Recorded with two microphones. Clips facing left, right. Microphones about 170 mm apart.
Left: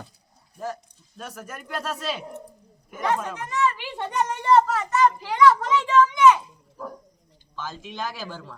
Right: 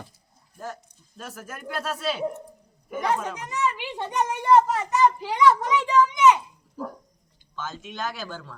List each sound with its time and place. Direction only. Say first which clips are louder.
0.5 s speech: left 4 dB; centre (ahead or behind)
7.5 s speech: even; 5° left (ahead or behind)